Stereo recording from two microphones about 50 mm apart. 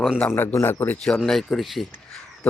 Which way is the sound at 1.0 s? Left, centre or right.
Centre.